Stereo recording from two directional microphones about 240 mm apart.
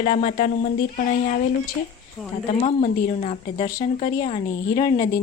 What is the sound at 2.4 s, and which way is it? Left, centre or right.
A woman's voice, left.